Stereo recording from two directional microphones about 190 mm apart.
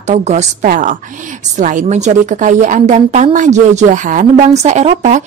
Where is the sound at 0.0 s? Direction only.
40° right (ahead or behind).